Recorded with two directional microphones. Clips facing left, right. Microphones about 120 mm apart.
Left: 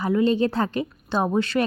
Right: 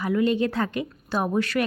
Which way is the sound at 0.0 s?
30° left (ahead or behind).